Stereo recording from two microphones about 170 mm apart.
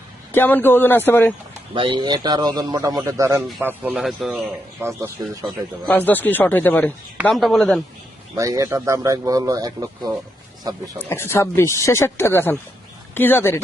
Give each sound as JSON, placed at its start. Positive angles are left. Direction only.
{"t": 0.3, "sound": "speech", "side_deg": 10}
{"t": 1.7, "sound": "speech", "side_deg": -30}
{"t": 5.0, "sound": "speech", "side_deg": -20}
{"t": 5.8, "sound": "a man's voice", "side_deg": 10}
{"t": 8.4, "sound": "speech", "side_deg": -20}
{"t": 10.9, "sound": "speech", "side_deg": 15}